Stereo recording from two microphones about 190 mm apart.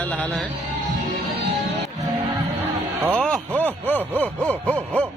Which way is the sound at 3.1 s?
5° left (ahead or behind).